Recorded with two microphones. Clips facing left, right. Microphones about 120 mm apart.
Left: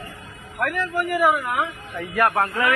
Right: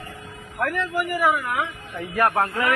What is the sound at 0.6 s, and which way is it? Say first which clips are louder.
Speech: even; 15° right (ahead or behind).